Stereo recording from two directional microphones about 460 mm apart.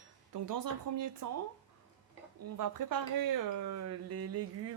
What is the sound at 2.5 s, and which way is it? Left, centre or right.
Speech, right.